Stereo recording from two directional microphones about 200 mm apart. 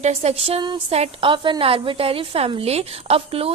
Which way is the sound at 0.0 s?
35° right (ahead or behind).